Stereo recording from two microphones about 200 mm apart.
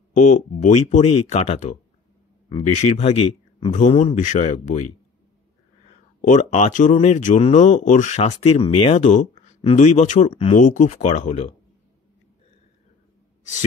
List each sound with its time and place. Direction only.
0.6 s speech: 35° left (ahead or behind)
6.2 s speech: 35° left (ahead or behind)
13.4 s a sound: 35° left (ahead or behind)